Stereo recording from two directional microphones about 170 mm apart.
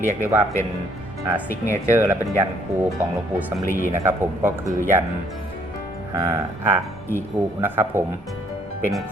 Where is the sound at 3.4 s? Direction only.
10° right (ahead or behind).